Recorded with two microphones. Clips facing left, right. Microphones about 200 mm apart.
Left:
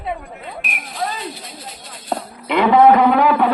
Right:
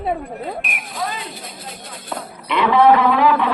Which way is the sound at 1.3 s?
50° right (ahead or behind).